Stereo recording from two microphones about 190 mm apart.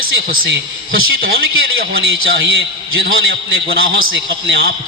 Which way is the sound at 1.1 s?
50° right (ahead or behind).